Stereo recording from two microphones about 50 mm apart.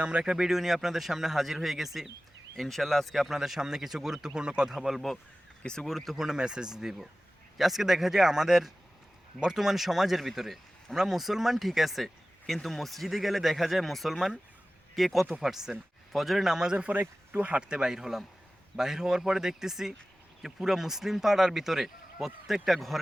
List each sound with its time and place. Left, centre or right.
0.0 s speech: centre
6.1 s speech: centre